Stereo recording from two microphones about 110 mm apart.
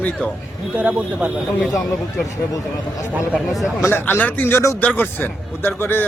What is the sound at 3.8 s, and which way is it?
A man's voice, 20° left (ahead or behind).